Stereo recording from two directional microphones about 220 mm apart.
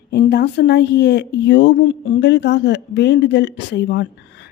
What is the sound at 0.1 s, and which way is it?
A woman's voice, 45° left (ahead or behind).